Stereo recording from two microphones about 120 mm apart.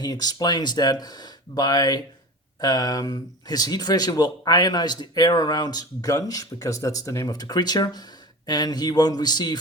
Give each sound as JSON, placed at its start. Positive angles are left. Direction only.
{"t": 0.0, "sound": "speech", "side_deg": 35}